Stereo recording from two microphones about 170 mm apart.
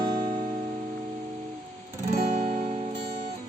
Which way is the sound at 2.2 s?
35° right (ahead or behind).